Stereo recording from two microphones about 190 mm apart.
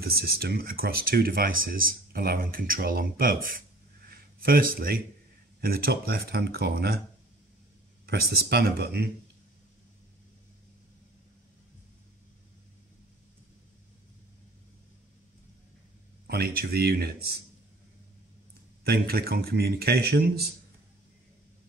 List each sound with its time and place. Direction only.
0.0 s speech: 55° right (ahead or behind)
8.1 s speech: 55° right (ahead or behind)
16.3 s speech: 55° right (ahead or behind)
18.9 s speech: 55° right (ahead or behind)